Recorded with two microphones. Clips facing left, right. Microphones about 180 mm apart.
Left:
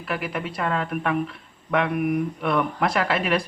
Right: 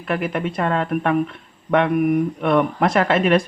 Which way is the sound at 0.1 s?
45° right (ahead or behind).